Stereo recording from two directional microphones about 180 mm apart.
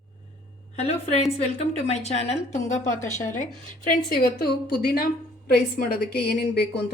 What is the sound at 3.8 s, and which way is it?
A woman's voice, 55° left (ahead or behind).